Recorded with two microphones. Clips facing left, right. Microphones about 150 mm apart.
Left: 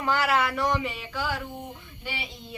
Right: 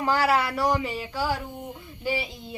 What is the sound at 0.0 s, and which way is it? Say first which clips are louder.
Speech: right 2 dB; 35° right (ahead or behind).